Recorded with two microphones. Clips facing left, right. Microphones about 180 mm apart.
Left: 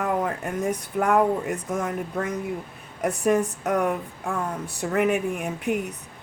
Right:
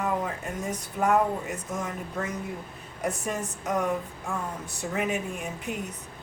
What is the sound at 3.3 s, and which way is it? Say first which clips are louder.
Speech: left 8 dB; 60° left (ahead or behind).